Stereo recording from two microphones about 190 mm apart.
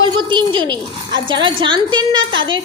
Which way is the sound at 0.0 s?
25° right (ahead or behind).